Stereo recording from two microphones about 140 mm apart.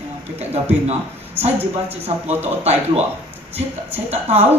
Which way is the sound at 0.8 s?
45° right (ahead or behind).